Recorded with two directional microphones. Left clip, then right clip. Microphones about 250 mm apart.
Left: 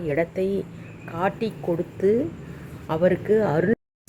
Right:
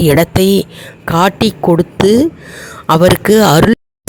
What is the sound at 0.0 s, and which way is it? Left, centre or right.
Speech, right.